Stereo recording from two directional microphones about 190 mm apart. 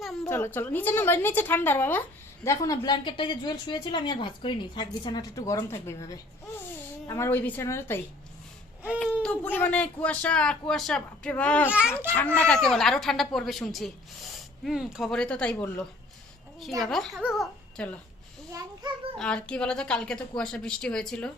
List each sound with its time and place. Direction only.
0.3 s a woman's voice: 10° left (ahead or behind)
9.0 s a woman's voice: centre (ahead or behind)
11.7 s speech: 5° right (ahead or behind)
12.1 s speech: 5° left (ahead or behind)
19.1 s speech: 5° left (ahead or behind)